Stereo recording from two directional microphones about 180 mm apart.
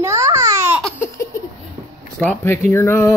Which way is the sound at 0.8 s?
5° left (ahead or behind).